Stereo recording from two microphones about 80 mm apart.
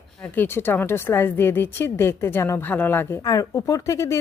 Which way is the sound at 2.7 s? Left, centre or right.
Left.